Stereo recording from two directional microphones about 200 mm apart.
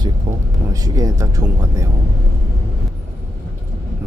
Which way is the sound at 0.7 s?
15° right (ahead or behind).